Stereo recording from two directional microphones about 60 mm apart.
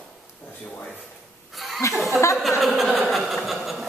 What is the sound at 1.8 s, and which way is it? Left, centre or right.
Speech, left.